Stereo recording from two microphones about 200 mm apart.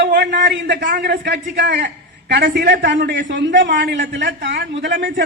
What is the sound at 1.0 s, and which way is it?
A woman's voice, 60° right (ahead or behind).